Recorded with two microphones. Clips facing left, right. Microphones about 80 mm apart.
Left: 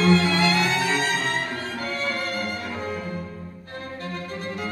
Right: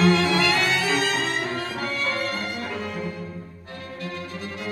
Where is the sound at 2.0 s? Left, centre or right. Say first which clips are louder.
Right 1 dB; right.